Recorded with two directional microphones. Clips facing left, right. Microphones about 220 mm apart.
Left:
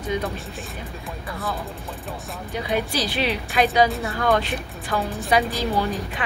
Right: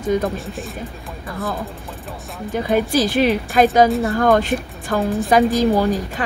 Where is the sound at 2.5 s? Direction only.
45° right (ahead or behind).